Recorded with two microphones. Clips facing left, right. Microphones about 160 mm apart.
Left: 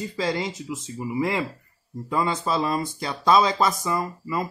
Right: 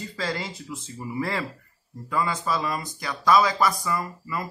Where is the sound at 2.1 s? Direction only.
25° left (ahead or behind).